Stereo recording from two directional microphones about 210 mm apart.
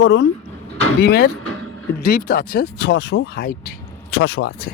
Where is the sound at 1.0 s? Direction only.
45° left (ahead or behind).